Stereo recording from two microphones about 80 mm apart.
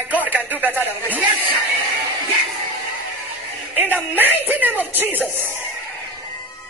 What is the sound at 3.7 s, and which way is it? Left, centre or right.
Speech, right.